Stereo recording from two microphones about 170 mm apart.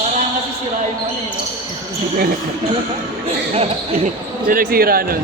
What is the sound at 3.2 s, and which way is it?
Speech, 35° right (ahead or behind).